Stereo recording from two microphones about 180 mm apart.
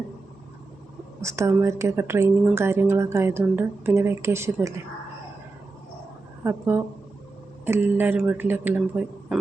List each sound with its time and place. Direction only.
1.2 s speech: 15° right (ahead or behind)
6.4 s speech: 15° right (ahead or behind)